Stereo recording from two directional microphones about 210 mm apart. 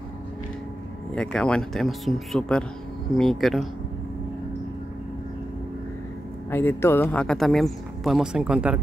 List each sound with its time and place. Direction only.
1.1 s speech: 5° left (ahead or behind)
6.5 s speech: 10° left (ahead or behind); by 8.8 s 5° right (ahead or behind)